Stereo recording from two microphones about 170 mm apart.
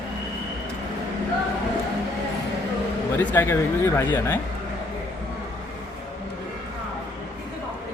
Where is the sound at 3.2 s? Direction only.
10° left (ahead or behind).